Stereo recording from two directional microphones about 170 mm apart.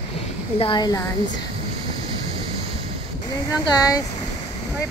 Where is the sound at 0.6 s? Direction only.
25° left (ahead or behind).